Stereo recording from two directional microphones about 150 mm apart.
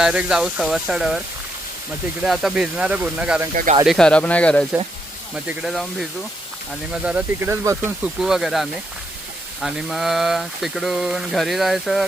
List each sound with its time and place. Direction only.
0.0 s speech: 5° right (ahead or behind)
2.2 s speech: 5° right (ahead or behind)
3.5 s speech: 60° right (ahead or behind)
3.8 s speech: 5° left (ahead or behind)
5.3 s speech: 5° right (ahead or behind)